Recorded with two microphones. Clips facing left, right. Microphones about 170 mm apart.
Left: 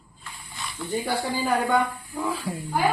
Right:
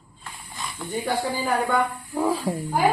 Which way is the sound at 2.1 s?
40° right (ahead or behind).